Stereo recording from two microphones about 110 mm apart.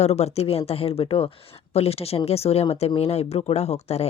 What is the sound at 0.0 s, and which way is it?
Speech, 75° left (ahead or behind).